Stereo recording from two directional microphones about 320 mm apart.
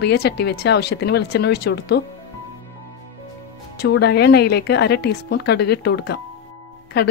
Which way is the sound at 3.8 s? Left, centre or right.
Left.